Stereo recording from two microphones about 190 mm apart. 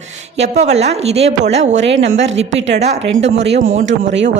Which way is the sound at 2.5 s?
75° right (ahead or behind).